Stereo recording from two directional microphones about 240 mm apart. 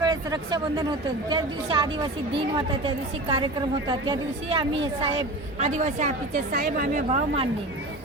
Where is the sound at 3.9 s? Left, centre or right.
Centre.